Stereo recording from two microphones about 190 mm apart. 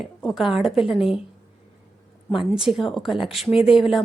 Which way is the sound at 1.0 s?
30° left (ahead or behind).